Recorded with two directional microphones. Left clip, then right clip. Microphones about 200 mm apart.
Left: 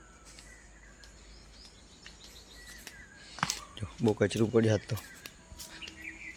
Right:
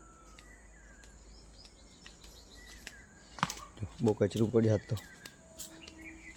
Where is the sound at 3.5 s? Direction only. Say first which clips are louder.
Left 6 dB; centre (ahead or behind).